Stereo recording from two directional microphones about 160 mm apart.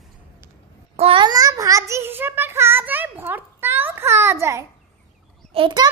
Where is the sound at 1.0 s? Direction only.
35° right (ahead or behind); by 4.7 s 15° right (ahead or behind).